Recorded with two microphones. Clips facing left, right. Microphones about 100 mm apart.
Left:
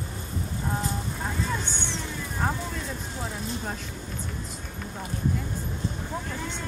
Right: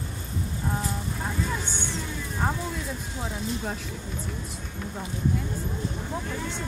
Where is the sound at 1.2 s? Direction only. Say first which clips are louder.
Even; centre (ahead or behind).